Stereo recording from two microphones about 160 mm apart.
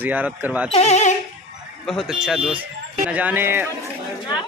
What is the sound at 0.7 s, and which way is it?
Speech, 40° left (ahead or behind).